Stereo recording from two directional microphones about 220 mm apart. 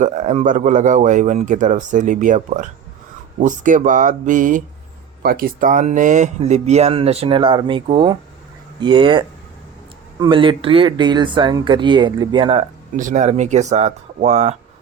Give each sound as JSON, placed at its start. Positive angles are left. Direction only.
{"t": 0.0, "sound": "speech", "side_deg": -30}